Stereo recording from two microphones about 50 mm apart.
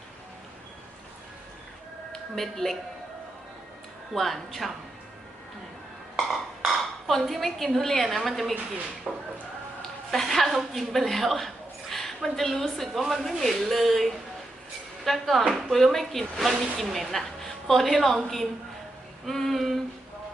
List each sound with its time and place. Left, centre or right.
2.3 s a woman's voice: centre
4.1 s a woman's voice: centre
6.1 s dishes: centre
8.0 s a woman's voice: centre
9.1 s speech: centre
10.1 s a woman's voice: centre